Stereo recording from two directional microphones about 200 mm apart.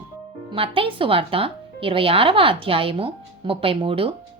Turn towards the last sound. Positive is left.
turn(degrees=-25)  # may be behind; listen again after turning